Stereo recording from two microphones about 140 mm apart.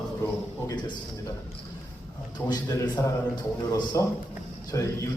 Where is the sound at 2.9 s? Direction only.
25° left (ahead or behind).